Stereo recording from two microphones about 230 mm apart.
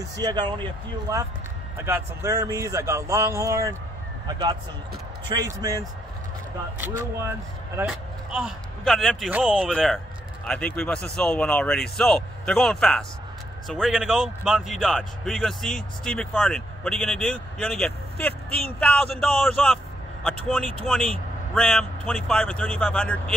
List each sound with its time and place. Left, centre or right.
0.0 s speech: centre
1.9 s speech: centre